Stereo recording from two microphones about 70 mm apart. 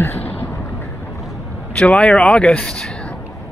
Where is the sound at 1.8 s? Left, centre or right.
Centre.